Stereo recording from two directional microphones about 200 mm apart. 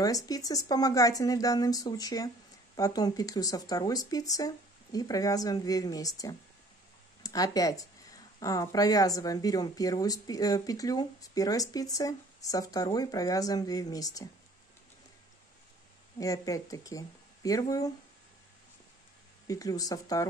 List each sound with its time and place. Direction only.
0.0 s speech: 15° left (ahead or behind)
16.2 s speech: 15° left (ahead or behind)
19.4 s speech: 15° left (ahead or behind)